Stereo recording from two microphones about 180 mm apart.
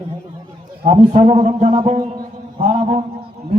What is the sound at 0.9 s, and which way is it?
A man's voice, 35° right (ahead or behind).